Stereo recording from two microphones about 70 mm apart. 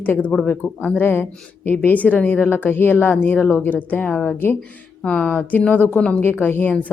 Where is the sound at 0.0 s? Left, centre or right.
Left.